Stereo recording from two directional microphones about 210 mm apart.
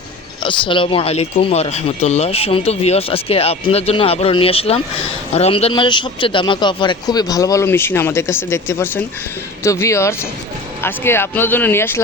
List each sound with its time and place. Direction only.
0.4 s speech: 25° left (ahead or behind)